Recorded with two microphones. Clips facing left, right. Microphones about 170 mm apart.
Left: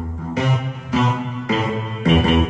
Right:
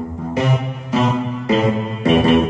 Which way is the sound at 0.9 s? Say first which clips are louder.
Right 3 dB; 30° right (ahead or behind).